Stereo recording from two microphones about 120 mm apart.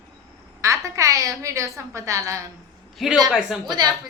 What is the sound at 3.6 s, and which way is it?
Speech, 35° right (ahead or behind).